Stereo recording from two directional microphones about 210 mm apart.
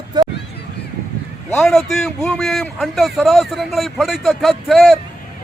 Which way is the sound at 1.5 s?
Centre (ahead or behind).